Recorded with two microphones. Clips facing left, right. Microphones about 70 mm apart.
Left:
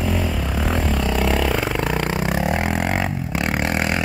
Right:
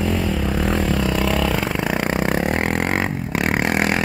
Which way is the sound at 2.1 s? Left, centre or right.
Right.